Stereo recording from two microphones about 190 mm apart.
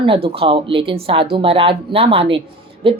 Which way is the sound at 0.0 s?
30° right (ahead or behind).